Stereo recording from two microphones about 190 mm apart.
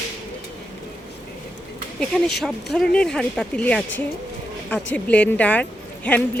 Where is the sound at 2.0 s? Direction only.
Centre (ahead or behind).